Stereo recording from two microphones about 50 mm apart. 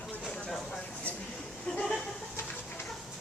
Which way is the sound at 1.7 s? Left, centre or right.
Left.